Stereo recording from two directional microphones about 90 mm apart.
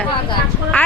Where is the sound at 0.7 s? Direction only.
20° left (ahead or behind).